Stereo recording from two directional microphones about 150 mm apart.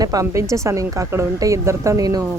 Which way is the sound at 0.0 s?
25° right (ahead or behind).